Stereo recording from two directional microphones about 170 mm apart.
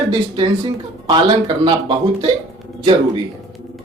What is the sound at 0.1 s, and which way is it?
Speech, 30° right (ahead or behind).